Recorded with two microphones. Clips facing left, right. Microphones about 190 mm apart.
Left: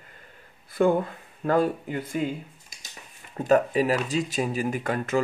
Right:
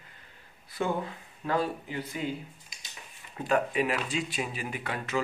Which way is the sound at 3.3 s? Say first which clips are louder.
Left 6 dB; 40° left (ahead or behind).